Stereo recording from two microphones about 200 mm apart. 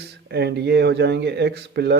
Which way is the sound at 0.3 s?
55° right (ahead or behind).